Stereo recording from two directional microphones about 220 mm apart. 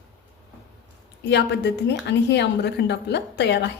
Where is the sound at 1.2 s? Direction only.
50° left (ahead or behind).